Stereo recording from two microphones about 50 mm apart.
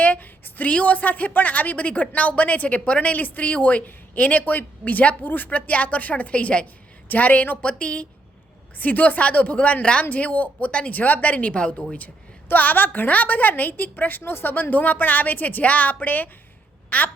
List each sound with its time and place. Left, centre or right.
0.0 s a woman's voice: left
12.5 s a woman's voice: left